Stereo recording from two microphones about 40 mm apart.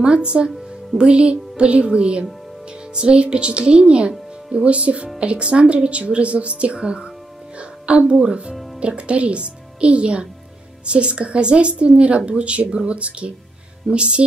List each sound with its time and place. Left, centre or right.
0.0 s a woman's voice: right
7.5 s music: right
8.1 s a woman's voice: right